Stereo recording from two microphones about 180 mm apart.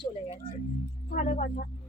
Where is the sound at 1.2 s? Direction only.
45° left (ahead or behind).